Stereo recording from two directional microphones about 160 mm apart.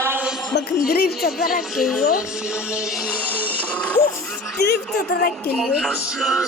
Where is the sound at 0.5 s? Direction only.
90° left.